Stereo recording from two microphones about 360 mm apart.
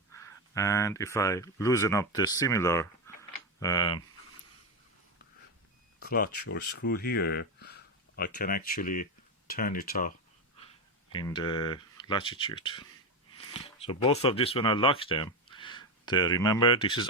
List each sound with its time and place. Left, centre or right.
0.1 s speech: centre
6.0 s speech: left
11.1 s speech: centre